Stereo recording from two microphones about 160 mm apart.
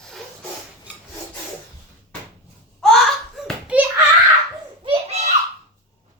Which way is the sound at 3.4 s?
Centre (ahead or behind).